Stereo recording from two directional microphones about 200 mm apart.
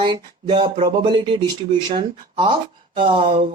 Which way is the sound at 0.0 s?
25° right (ahead or behind).